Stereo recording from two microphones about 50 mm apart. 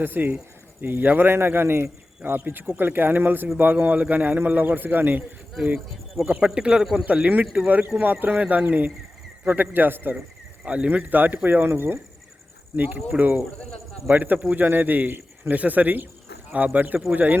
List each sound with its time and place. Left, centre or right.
0.0 s a man's voice: right
6.4 s a man's voice: centre
7.2 s a man's voice: right
10.6 s a man's voice: right
12.7 s a man's voice: right
14.3 s a man's voice: right
14.6 s a man's voice: right